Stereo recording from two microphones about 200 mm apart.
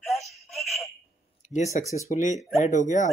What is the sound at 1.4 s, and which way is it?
Speech, 35° left (ahead or behind).